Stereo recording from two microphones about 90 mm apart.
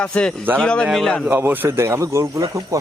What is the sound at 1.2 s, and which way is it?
Speech, 25° right (ahead or behind).